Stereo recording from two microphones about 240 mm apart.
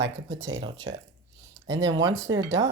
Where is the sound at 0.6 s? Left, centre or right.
Right.